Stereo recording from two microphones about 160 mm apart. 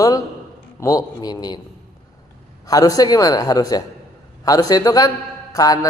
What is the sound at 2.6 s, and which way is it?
Speech, 25° left (ahead or behind).